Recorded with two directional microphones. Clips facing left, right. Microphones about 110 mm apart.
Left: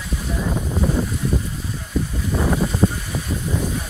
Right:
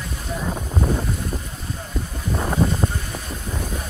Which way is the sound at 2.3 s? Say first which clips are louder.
Left 3 dB; 10° right (ahead or behind).